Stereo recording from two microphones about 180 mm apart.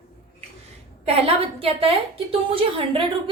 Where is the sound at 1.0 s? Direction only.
30° right (ahead or behind).